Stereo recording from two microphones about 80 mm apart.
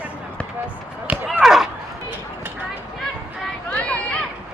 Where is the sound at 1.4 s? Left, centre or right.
Centre.